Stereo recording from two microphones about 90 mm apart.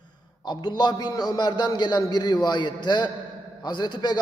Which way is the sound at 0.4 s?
50° left (ahead or behind).